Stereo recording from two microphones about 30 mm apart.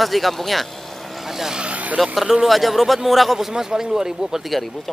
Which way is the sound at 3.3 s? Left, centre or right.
Centre.